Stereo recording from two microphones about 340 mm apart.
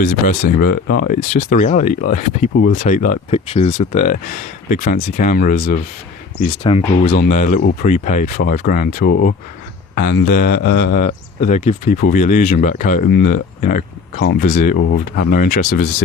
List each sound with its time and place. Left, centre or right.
0.0 s speech: left
14.8 s speech: left